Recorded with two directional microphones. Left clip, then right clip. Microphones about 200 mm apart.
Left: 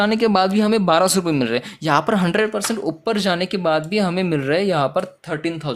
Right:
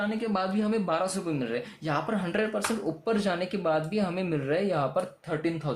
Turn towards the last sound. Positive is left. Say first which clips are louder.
# left 6 dB
turn(degrees=30)  # may be behind; listen again after turning